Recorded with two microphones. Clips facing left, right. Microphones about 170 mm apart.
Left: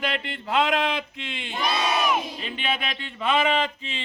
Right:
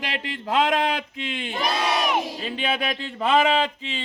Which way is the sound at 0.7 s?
40° right (ahead or behind).